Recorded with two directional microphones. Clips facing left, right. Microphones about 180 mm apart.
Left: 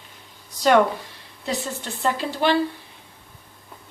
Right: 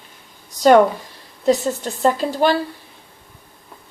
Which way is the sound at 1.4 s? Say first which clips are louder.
Right 10 dB; 45° right (ahead or behind).